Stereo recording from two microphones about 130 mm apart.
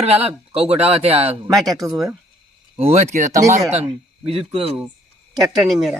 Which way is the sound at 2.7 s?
55° right (ahead or behind).